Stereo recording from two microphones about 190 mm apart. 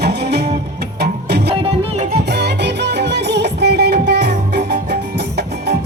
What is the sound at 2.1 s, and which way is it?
Music, 60° right (ahead or behind).